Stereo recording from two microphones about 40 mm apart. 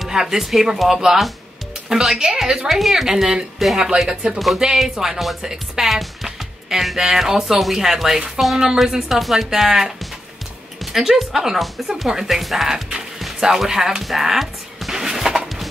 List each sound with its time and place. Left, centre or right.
0.1 s speech: centre
3.5 s speech: centre
4.1 s speech: centre
14.0 s music: centre